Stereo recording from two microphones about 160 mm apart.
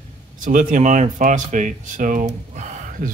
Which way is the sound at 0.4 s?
55° right (ahead or behind).